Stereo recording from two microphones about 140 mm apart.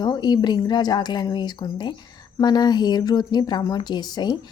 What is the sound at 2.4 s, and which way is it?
Speech, 30° left (ahead or behind).